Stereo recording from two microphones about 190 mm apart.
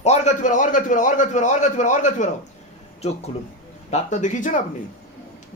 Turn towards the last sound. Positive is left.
turn(degrees=40)  # may be behind; listen again after turning